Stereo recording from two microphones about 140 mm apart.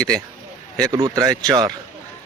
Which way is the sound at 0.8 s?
30° right (ahead or behind).